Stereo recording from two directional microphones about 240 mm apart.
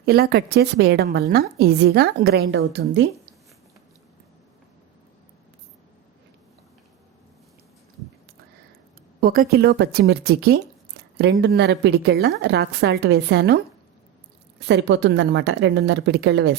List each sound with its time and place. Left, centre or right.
0.0 s a woman's voice: right
9.2 s speech: right
14.7 s speech: right